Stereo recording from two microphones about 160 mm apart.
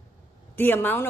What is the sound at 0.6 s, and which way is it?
Speech, 10° left (ahead or behind).